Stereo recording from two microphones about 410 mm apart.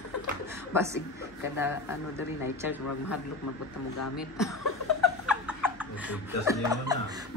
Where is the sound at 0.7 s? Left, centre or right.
Centre.